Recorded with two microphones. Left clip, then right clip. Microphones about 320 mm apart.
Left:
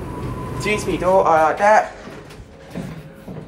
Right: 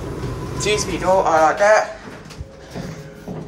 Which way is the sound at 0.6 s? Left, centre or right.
Centre.